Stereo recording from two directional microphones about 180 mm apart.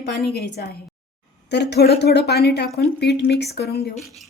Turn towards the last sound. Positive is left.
turn(degrees=0)  # may be behind; listen again after turning